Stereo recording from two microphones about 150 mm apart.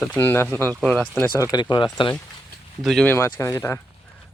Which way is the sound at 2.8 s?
Centre (ahead or behind).